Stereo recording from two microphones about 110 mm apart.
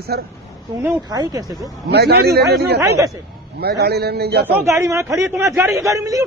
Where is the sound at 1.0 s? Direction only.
35° right (ahead or behind).